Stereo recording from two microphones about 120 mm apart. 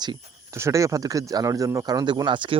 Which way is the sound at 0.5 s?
25° right (ahead or behind).